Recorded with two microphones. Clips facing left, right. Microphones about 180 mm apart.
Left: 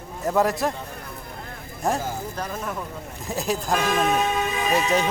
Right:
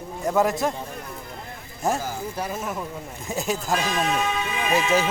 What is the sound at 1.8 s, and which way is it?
A man's voice, centre (ahead or behind).